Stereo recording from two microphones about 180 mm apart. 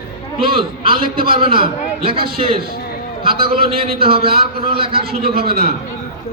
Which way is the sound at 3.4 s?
30° right (ahead or behind).